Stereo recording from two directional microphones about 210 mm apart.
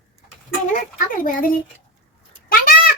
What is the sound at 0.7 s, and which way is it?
Speech, 40° left (ahead or behind).